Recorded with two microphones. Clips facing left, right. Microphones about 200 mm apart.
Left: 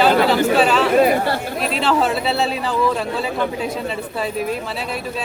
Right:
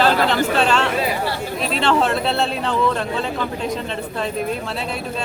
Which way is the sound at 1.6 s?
Centre (ahead or behind).